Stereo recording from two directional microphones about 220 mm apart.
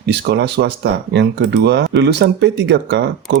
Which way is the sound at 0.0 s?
50° right (ahead or behind).